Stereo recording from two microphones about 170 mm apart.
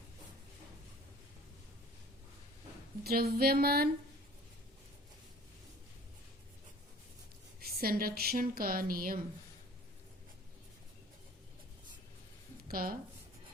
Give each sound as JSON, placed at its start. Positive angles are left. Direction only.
{"t": 3.0, "sound": "a woman's voice", "side_deg": -65}
{"t": 7.6, "sound": "a woman's voice", "side_deg": -60}
{"t": 12.6, "sound": "speech", "side_deg": -60}